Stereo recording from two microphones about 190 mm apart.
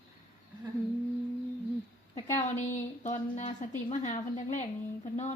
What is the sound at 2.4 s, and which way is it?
A woman's voice, 40° left (ahead or behind).